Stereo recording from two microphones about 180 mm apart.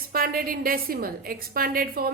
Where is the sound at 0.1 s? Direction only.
55° right (ahead or behind).